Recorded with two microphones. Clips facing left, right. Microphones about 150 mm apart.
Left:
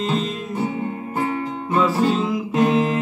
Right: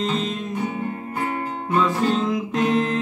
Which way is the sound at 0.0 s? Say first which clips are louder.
Left 1 dB; centre (ahead or behind).